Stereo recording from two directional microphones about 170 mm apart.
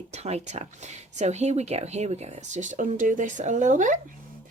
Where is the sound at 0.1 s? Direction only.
40° right (ahead or behind).